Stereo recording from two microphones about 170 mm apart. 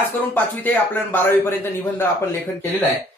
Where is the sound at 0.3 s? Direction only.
10° left (ahead or behind).